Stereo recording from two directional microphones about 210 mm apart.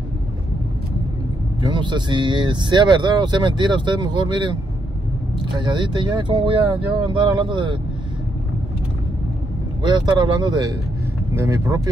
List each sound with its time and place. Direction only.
1.6 s speech: 20° right (ahead or behind)
9.8 s speech: 20° right (ahead or behind)